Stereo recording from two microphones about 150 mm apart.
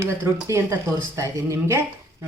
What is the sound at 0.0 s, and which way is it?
Dishes, 20° right (ahead or behind).